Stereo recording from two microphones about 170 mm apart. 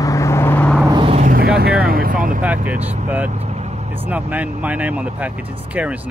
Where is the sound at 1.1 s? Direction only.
55° right (ahead or behind).